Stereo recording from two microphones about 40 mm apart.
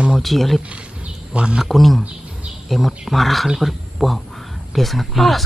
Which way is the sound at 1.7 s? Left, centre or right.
Centre.